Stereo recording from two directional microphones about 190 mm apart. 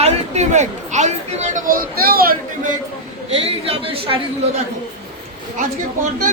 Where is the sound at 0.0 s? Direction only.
35° right (ahead or behind); by 2.7 s 50° right (ahead or behind).